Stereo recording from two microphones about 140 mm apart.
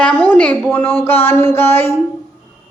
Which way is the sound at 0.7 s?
10° left (ahead or behind).